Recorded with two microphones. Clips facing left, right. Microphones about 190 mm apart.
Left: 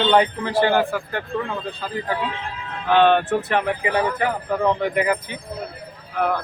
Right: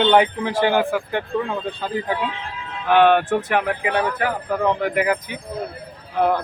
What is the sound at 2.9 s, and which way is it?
Speech, 10° right (ahead or behind).